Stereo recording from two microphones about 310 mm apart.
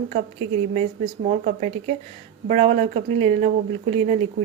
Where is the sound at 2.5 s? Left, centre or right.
Right.